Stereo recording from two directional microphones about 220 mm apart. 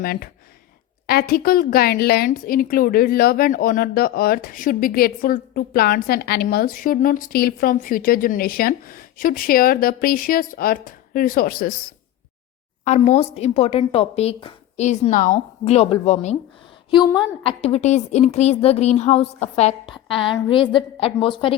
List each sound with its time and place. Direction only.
0.0 s a woman's voice: 45° left (ahead or behind)
12.8 s a woman's voice: 30° left (ahead or behind)
16.9 s a woman's voice: 20° left (ahead or behind)